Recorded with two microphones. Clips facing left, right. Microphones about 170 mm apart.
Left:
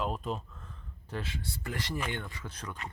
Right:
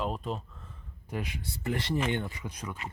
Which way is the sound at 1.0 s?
15° right (ahead or behind).